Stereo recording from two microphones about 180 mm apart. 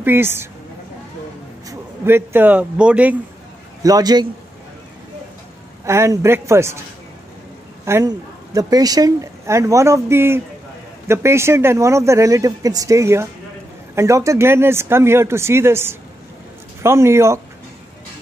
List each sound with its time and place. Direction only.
0.0 s speech: 10° right (ahead or behind)
1.7 s a man's voice: 10° right (ahead or behind)
3.8 s a man's voice: 20° right (ahead or behind)
5.9 s speech: 15° right (ahead or behind)
7.8 s speech: 15° right (ahead or behind)